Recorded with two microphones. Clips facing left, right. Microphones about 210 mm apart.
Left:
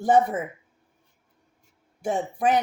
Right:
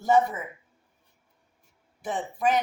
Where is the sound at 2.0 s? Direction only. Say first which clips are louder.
Left 3 dB; 45° left (ahead or behind).